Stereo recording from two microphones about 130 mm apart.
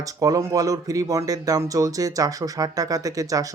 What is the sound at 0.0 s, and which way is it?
Speech, 25° right (ahead or behind).